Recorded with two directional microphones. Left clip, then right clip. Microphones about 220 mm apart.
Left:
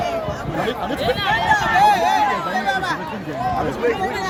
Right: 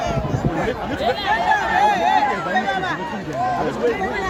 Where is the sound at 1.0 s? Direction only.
45° left (ahead or behind).